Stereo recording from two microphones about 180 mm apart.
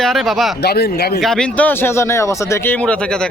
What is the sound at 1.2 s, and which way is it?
Speech, 5° left (ahead or behind).